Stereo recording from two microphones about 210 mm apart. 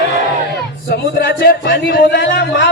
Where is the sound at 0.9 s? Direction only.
50° left (ahead or behind).